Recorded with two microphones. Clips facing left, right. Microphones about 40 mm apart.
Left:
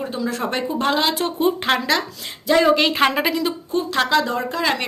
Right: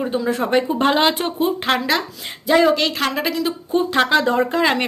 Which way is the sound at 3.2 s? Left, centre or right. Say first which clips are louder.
Even; centre.